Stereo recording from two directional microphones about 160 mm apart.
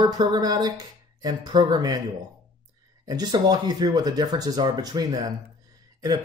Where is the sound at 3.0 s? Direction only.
25° right (ahead or behind).